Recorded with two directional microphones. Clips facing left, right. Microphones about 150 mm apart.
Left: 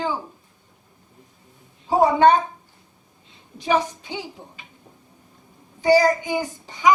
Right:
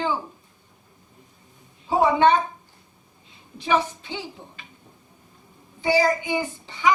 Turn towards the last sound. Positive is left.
turn(degrees=45)  # may be behind; listen again after turning